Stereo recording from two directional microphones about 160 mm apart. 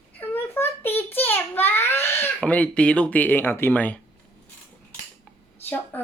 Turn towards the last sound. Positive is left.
turn(degrees=10)  # may be behind; listen again after turning